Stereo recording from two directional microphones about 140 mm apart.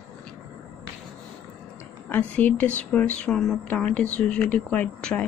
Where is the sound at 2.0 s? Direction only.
10° left (ahead or behind).